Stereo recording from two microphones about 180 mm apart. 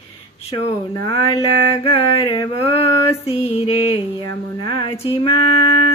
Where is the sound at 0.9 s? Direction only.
25° left (ahead or behind).